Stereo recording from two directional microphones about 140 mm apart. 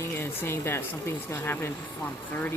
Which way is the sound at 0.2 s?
15° left (ahead or behind).